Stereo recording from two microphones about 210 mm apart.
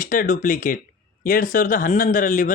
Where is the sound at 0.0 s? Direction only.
40° left (ahead or behind).